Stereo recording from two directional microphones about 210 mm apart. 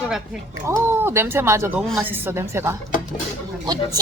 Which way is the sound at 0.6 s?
10° right (ahead or behind).